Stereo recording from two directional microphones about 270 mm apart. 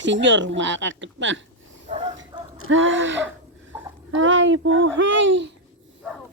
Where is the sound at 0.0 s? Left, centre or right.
Right.